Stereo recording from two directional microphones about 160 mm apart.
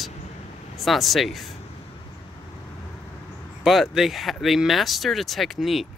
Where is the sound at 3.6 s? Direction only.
Centre (ahead or behind).